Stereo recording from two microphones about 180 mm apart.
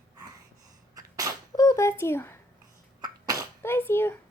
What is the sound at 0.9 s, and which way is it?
Sneeze, 20° right (ahead or behind).